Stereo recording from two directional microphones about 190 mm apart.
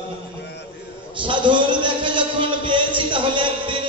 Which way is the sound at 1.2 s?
25° right (ahead or behind).